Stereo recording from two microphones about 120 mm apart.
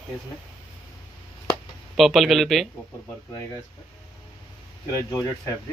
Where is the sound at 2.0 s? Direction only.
Centre (ahead or behind).